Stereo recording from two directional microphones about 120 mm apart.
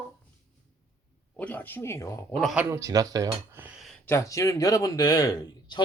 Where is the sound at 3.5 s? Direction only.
15° right (ahead or behind).